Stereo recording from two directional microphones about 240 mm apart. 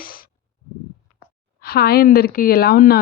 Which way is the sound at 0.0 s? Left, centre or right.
Left.